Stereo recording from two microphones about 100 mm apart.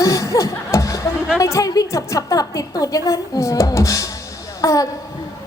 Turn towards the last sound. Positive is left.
turn(degrees=35)  # may be behind; listen again after turning